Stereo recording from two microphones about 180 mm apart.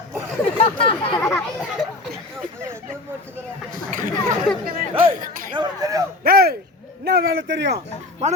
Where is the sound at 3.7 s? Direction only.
50° right (ahead or behind).